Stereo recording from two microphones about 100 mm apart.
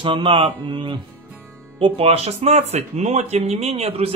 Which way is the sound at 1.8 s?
80° right.